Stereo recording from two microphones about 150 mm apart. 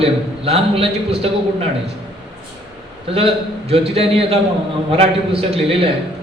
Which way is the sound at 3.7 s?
40° right (ahead or behind).